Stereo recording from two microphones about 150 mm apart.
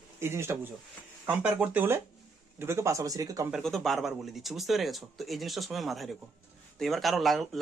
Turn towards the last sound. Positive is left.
turn(degrees=0)  # may be behind; listen again after turning